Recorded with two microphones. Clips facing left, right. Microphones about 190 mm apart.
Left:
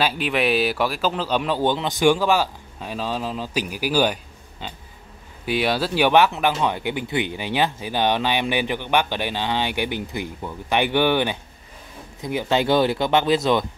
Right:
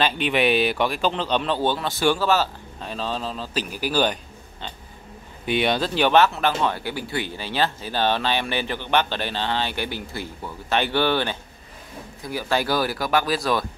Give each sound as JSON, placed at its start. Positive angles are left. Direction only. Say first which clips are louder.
{"t": 0.0, "sound": "speech", "louder": "right 1 dB", "side_deg": 5}